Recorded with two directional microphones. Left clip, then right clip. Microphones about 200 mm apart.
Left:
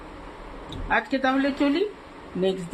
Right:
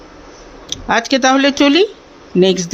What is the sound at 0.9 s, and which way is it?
Speech, 55° right (ahead or behind).